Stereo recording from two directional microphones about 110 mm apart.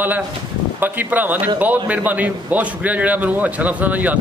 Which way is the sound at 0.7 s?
15° right (ahead or behind).